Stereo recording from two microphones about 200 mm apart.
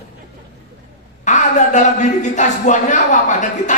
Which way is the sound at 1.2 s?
35° left (ahead or behind).